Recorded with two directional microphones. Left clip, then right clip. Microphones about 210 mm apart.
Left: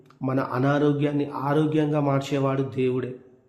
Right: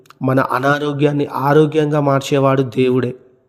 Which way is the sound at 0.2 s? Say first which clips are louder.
Right 10 dB; 40° right (ahead or behind).